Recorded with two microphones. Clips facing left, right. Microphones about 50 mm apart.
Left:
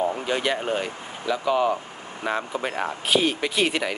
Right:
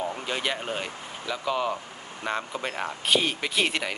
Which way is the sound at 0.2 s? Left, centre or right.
Centre.